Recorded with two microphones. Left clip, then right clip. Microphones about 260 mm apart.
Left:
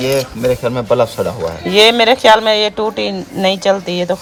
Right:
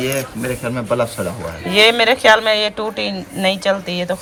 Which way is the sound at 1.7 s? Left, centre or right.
Centre.